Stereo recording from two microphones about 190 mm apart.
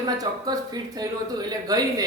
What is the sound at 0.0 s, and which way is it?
Speech, 20° right (ahead or behind).